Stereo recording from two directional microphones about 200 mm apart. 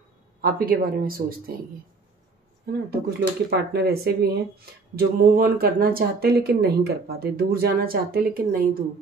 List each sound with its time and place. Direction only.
0.4 s speech: 45° right (ahead or behind)
2.6 s speech: 55° right (ahead or behind)